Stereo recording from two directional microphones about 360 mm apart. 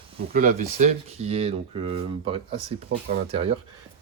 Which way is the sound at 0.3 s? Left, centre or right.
Right.